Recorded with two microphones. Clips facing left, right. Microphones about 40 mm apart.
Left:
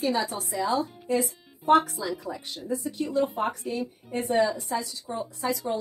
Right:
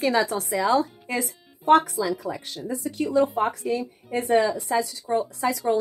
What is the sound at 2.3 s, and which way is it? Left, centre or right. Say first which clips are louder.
A woman's voice: right 1 dB; right.